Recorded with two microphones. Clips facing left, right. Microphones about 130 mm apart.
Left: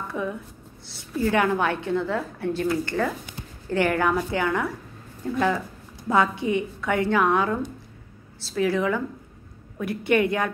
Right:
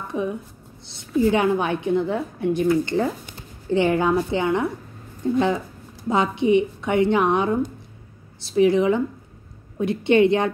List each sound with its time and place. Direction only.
0.1 s a woman's voice: 20° right (ahead or behind)